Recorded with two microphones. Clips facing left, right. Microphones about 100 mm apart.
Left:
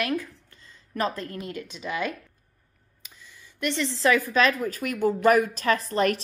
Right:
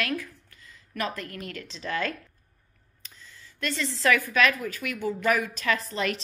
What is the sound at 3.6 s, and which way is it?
A woman's voice, 25° left (ahead or behind).